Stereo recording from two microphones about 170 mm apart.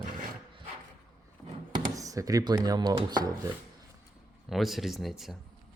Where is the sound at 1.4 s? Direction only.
5° right (ahead or behind).